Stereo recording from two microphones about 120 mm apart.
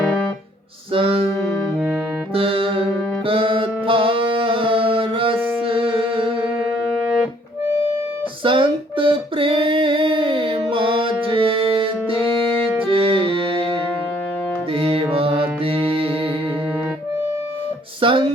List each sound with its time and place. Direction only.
0.9 s music: 50° right (ahead or behind)
2.3 s music: 50° right (ahead or behind)
8.4 s music: 45° right (ahead or behind)
18.0 s a sound: 45° right (ahead or behind)